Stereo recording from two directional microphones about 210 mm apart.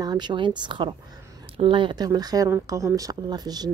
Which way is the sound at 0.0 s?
20° right (ahead or behind).